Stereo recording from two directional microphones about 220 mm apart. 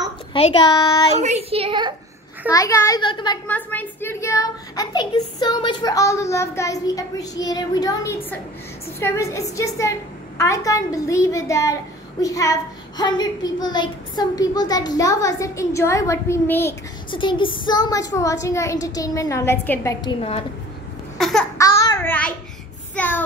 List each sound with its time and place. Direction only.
0.3 s a woman's voice: 20° left (ahead or behind)
1.2 s a child's voice: 30° right (ahead or behind)
2.5 s a woman's voice: 15° left (ahead or behind)
3.4 s a woman's voice: 10° left (ahead or behind)
17.1 s a woman's voice: 20° left (ahead or behind)
21.2 s a sound: centre (ahead or behind)
21.5 s babbling: 15° left (ahead or behind)
22.9 s child singing: 10° left (ahead or behind)